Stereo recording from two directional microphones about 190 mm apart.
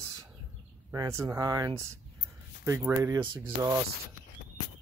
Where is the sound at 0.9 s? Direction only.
15° right (ahead or behind).